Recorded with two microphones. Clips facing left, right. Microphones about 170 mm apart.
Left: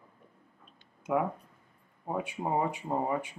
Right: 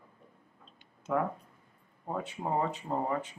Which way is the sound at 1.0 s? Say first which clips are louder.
Left 1 dB; 10° left (ahead or behind).